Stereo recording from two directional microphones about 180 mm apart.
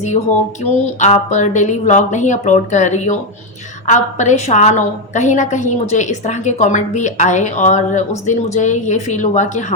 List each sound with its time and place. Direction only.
0.6 s a woman's voice: 40° left (ahead or behind)